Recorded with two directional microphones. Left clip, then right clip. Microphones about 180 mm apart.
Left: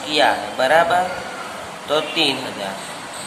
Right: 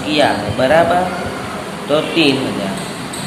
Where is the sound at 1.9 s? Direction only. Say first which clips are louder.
Right 5 dB; 35° left (ahead or behind).